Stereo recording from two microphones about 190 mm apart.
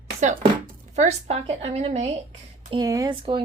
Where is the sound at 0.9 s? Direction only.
35° right (ahead or behind).